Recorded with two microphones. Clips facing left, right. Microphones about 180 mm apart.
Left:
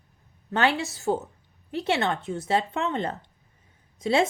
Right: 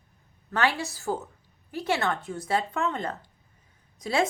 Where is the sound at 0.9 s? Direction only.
25° left (ahead or behind).